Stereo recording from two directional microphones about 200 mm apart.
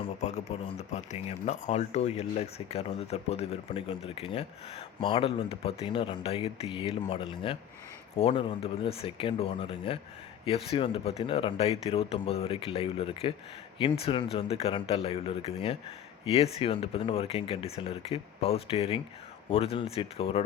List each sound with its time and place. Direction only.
0.0 s speech: 35° left (ahead or behind)